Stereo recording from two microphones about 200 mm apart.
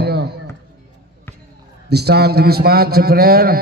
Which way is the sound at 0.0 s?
55° right (ahead or behind).